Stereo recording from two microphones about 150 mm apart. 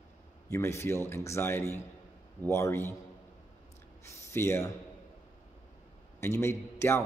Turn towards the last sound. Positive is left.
turn(degrees=15)  # may be behind; listen again after turning